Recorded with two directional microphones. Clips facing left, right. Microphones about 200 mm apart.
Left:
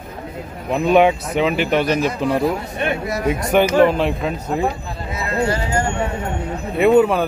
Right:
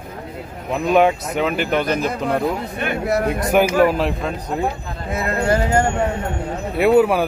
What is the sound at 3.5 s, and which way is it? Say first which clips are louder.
Speech: left 1 dB; 5° right (ahead or behind).